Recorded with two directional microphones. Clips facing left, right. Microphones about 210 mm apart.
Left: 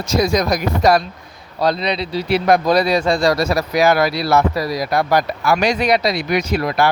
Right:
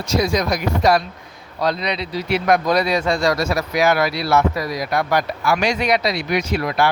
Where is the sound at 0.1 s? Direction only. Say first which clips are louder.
Left 2 dB; 40° left (ahead or behind).